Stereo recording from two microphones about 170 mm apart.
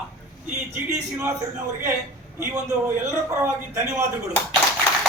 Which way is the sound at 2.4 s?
20° right (ahead or behind).